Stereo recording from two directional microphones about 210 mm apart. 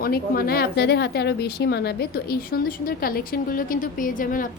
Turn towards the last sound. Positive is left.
turn(degrees=40)  # may be behind; listen again after turning